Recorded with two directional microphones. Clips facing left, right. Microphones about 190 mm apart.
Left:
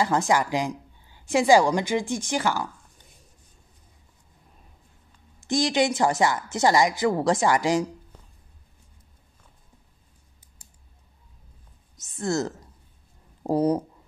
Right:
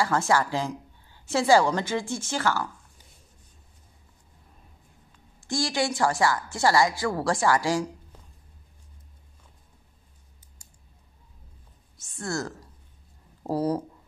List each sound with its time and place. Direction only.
0.0 s a woman's voice: 15° left (ahead or behind)
5.4 s a woman's voice: 20° left (ahead or behind)
12.0 s speech: 20° left (ahead or behind)